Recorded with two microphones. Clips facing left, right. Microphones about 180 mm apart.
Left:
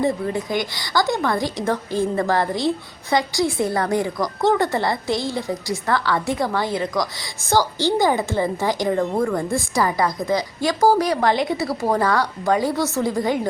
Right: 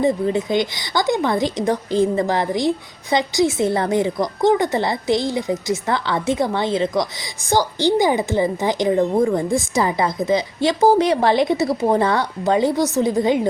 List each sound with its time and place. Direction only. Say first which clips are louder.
0.0 s speech: right 3 dB; 20° right (ahead or behind)